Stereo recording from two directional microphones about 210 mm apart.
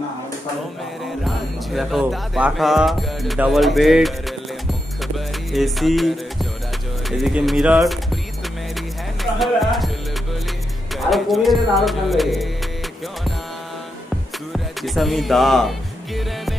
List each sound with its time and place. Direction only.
1.2 s speech: centre (ahead or behind)
5.0 s music: centre (ahead or behind)
7.1 s speech: centre (ahead or behind)
9.2 s music: centre (ahead or behind)
11.0 s speech: centre (ahead or behind)
14.5 s music: centre (ahead or behind)